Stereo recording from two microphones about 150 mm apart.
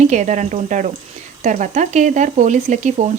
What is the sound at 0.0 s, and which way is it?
Speech, 50° right (ahead or behind).